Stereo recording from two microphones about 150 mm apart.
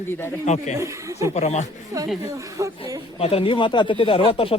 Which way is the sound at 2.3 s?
20° right (ahead or behind).